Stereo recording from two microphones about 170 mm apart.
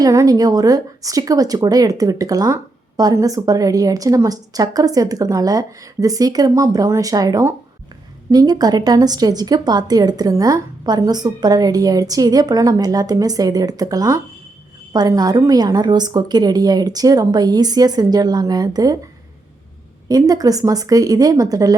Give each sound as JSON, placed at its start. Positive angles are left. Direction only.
{"t": 0.0, "sound": "speech", "side_deg": -20}
{"t": 20.1, "sound": "speech", "side_deg": -20}